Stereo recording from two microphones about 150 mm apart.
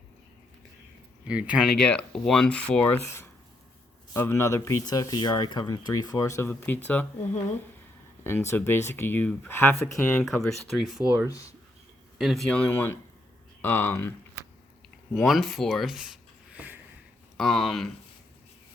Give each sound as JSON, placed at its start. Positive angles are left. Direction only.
{"t": 1.3, "sound": "speech", "side_deg": -10}
{"t": 1.8, "sound": "speech", "side_deg": 5}
{"t": 8.2, "sound": "speech", "side_deg": 15}
{"t": 10.2, "sound": "speech", "side_deg": 0}
{"t": 12.1, "sound": "speech", "side_deg": 0}
{"t": 15.1, "sound": "speech", "side_deg": 0}
{"t": 16.5, "sound": "a sound", "side_deg": -10}
{"t": 17.3, "sound": "speech", "side_deg": 5}